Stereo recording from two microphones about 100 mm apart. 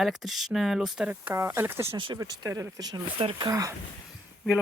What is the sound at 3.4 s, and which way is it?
Speech, 35° right (ahead or behind).